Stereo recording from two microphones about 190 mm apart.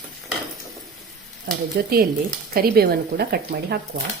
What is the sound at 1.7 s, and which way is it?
A woman's voice, 50° right (ahead or behind).